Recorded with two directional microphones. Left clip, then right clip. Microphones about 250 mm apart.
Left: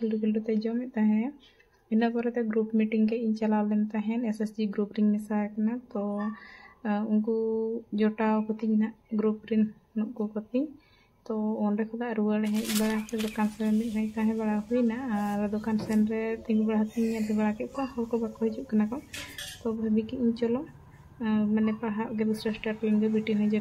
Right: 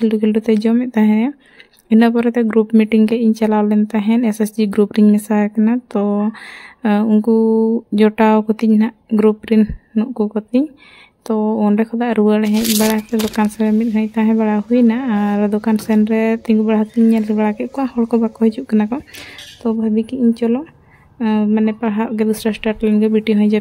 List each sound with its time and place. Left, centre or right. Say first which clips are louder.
0.0 s speech: right 14 dB; right